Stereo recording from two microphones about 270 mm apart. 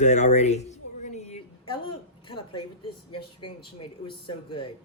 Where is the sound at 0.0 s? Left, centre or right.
Left.